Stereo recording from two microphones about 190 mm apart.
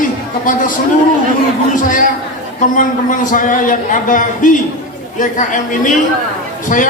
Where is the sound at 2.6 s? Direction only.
45° left (ahead or behind).